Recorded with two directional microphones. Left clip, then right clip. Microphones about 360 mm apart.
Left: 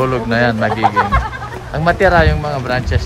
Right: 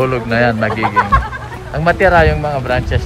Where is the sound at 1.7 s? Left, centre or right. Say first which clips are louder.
Right 1 dB; centre.